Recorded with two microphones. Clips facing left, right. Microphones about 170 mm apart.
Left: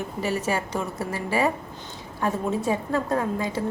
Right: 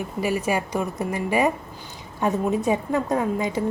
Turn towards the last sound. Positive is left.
turn(degrees=-15)  # may be behind; listen again after turning